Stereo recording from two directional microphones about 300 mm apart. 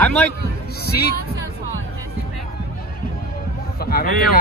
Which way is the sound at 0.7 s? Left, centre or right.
Left.